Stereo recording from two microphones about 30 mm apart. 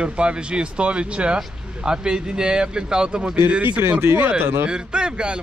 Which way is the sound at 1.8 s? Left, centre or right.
Right.